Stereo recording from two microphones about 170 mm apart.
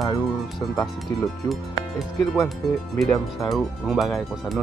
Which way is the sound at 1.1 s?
20° left (ahead or behind).